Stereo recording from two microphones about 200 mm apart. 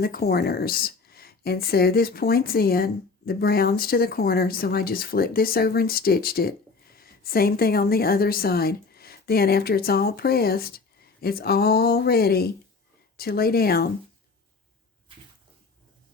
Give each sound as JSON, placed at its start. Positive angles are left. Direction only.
{"t": 0.0, "sound": "speech", "side_deg": 50}